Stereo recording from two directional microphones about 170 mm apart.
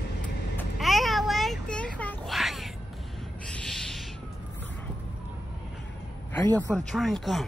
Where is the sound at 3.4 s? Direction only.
5° left (ahead or behind).